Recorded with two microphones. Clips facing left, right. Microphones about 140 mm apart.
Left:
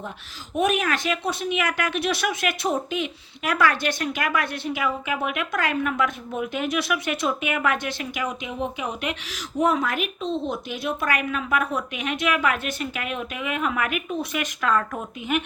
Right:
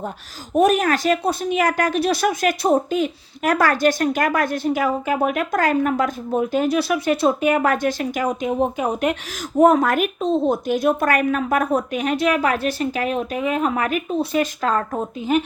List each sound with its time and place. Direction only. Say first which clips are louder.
0.5 s speech: right 6 dB; 40° right (ahead or behind)